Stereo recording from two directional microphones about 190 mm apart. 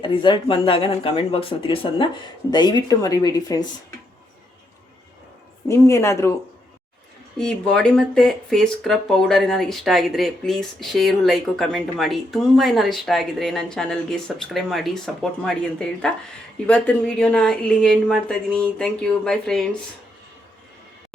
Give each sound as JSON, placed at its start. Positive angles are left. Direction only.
{"t": 0.0, "sound": "speech", "side_deg": 25}
{"t": 5.6, "sound": "speech", "side_deg": 15}
{"t": 7.3, "sound": "speech", "side_deg": 5}